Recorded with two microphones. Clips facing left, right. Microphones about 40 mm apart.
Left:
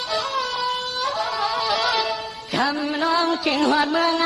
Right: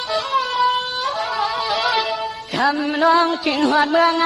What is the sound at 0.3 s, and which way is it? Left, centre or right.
Wind instrument, right.